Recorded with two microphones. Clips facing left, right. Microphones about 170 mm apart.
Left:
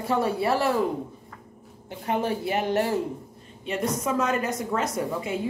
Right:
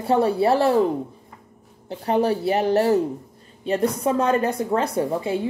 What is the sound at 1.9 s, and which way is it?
A woman's voice, 35° right (ahead or behind).